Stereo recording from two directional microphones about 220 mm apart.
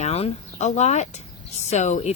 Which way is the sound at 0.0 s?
30° left (ahead or behind).